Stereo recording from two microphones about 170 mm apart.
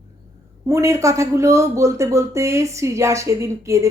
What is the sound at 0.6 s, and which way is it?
Speech, 20° right (ahead or behind).